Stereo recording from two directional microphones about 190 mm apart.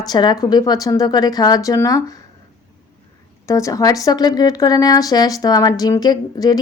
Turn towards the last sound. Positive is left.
turn(degrees=20)  # may be behind; listen again after turning